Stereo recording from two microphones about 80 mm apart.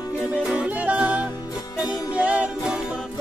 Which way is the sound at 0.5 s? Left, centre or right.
Centre.